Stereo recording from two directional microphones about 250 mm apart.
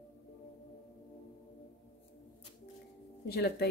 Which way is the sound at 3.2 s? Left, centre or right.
Left.